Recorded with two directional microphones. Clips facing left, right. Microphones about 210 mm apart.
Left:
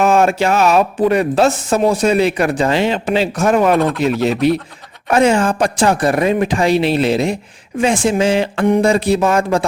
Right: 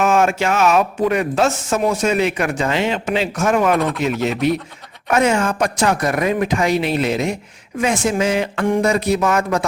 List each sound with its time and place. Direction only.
0.0 s speech: 35° left (ahead or behind)
7.8 s a sound: 30° left (ahead or behind)
8.8 s speech: 30° left (ahead or behind)